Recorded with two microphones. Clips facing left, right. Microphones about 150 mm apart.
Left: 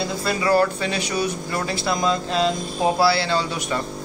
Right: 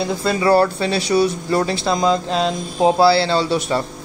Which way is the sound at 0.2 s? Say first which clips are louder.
Right 4 dB; 30° right (ahead or behind).